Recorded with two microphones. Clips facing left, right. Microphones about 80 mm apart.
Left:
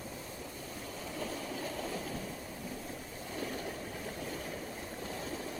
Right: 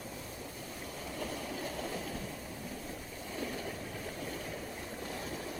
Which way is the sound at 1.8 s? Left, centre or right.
Left.